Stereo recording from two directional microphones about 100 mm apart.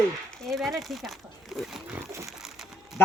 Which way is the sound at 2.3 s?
5° right (ahead or behind).